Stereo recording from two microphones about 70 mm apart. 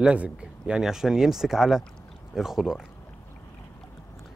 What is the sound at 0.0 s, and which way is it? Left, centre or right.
Speech, centre.